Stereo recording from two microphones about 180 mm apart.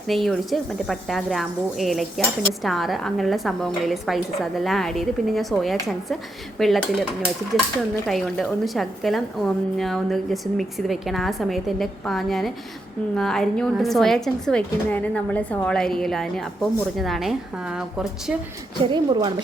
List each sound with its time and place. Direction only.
0.1 s a woman's voice: centre (ahead or behind)
8.0 s a woman's voice: centre (ahead or behind)
18.8 s a woman's voice: 25° right (ahead or behind)